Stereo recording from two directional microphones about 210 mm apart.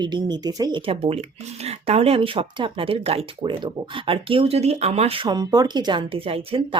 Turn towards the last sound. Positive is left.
turn(degrees=-25)  # may be behind; listen again after turning